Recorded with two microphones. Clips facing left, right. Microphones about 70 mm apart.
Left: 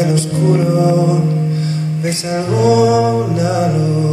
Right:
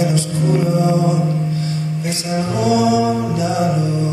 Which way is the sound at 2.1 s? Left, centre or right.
Left.